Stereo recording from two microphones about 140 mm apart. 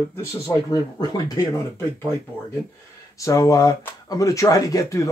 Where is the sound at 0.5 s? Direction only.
30° left (ahead or behind).